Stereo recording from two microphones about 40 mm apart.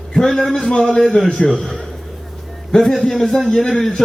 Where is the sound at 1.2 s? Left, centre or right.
Left.